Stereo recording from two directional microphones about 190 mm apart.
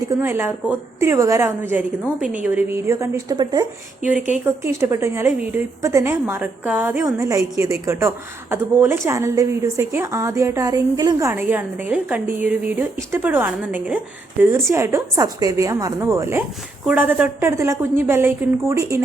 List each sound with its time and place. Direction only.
0.2 s a woman's voice: 10° right (ahead or behind)